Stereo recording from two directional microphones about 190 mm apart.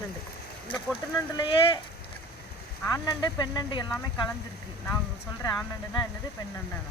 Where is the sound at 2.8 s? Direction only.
20° left (ahead or behind).